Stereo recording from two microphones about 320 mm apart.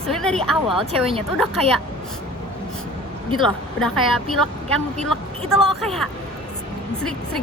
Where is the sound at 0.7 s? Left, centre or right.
Centre.